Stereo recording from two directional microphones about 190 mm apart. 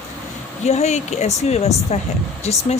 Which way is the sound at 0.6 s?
35° left (ahead or behind).